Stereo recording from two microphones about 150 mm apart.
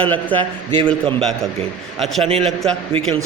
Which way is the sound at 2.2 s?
40° right (ahead or behind).